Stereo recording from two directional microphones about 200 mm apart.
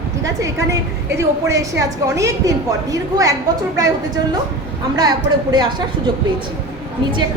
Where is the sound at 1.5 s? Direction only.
15° right (ahead or behind).